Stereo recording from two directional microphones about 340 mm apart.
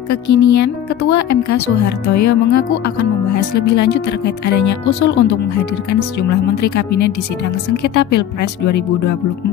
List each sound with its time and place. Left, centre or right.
0.1 s speech: left
7.7 s speech: left
8.1 s speech: left